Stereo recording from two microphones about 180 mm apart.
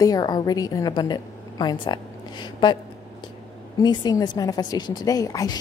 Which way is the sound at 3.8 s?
25° left (ahead or behind).